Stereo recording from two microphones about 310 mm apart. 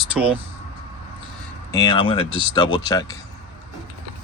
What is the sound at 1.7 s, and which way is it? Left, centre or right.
Speech, centre.